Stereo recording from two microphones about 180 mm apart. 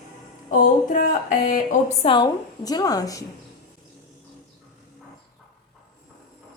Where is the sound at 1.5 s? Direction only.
45° left (ahead or behind).